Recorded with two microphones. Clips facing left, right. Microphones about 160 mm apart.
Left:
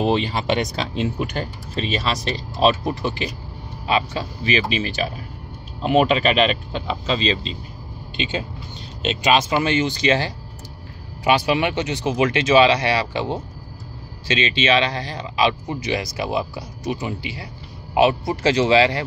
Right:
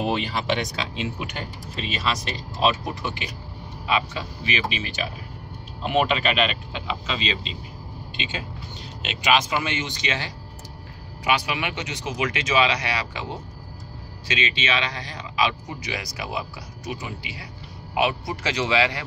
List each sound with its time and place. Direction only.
1.0 s a man's voice: 40° left (ahead or behind)